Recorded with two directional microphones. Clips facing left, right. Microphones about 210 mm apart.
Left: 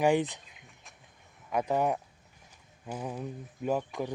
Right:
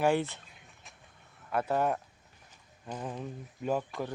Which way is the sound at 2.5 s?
10° left (ahead or behind).